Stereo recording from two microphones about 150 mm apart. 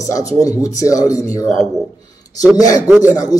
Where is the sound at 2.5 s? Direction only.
25° left (ahead or behind).